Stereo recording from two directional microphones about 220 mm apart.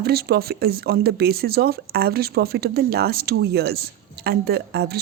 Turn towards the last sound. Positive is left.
turn(degrees=-45)  # may be behind; listen again after turning